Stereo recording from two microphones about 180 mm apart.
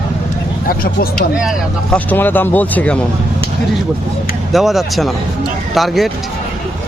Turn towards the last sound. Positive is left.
turn(degrees=0)  # may be behind; listen again after turning